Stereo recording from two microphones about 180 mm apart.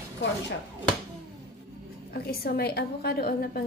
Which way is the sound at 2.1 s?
60° left (ahead or behind).